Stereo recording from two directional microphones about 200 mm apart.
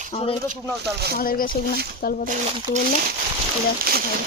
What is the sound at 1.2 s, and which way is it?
Speech, 45° left (ahead or behind).